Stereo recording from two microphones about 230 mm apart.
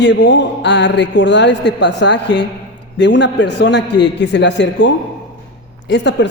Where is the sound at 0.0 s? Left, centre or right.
Left.